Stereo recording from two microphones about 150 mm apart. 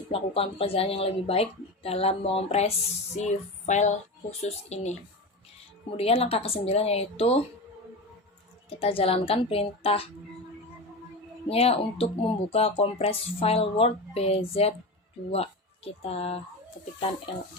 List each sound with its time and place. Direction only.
0.1 s a woman's voice: 40° left (ahead or behind)
6.0 s speech: 40° left (ahead or behind)
8.8 s speech: 40° left (ahead or behind)
11.4 s speech: 40° left (ahead or behind)